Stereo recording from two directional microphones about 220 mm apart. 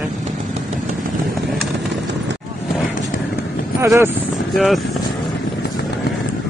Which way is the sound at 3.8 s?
10° right (ahead or behind).